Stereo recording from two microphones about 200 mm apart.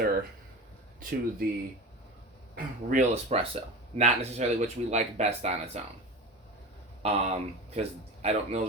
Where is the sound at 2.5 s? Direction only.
40° right (ahead or behind).